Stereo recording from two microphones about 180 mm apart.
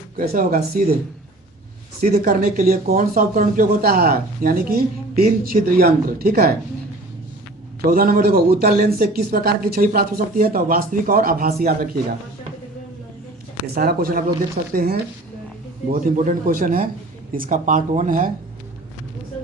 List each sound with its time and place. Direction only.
0.2 s speech: 50° right (ahead or behind)
2.0 s speech: 50° right (ahead or behind)
7.9 s a man's voice: 50° right (ahead or behind)
13.7 s a man's voice: 55° right (ahead or behind)